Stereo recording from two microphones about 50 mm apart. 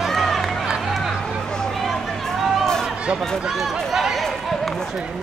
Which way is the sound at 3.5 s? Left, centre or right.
Centre.